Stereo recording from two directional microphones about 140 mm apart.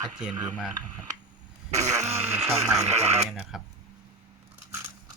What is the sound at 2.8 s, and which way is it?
Speech, 50° right (ahead or behind).